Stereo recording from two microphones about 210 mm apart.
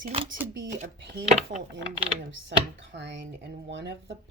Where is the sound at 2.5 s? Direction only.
55° right (ahead or behind).